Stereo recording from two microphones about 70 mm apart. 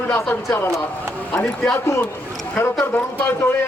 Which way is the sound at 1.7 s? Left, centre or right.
Left.